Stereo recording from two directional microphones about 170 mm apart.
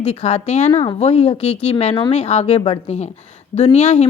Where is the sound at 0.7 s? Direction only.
20° left (ahead or behind).